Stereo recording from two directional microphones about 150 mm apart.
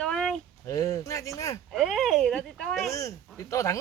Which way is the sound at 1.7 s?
Centre (ahead or behind).